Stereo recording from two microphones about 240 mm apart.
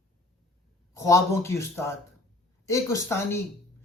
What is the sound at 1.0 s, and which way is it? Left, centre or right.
Speech, centre.